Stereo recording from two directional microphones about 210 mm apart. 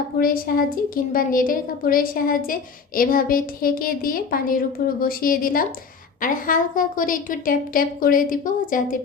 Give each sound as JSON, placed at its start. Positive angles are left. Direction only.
{"t": 0.2, "sound": "a woman's voice", "side_deg": 45}